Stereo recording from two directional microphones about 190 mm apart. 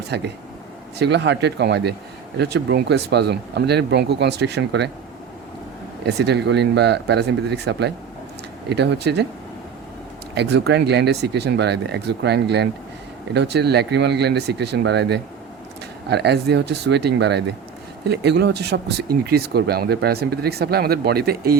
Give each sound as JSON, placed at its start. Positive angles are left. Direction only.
{"t": 0.1, "sound": "speech", "side_deg": -60}
{"t": 6.1, "sound": "speech", "side_deg": -60}
{"t": 10.3, "sound": "speech", "side_deg": -60}